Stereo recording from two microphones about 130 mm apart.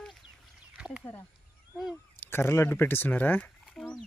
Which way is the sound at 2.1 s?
15° left (ahead or behind).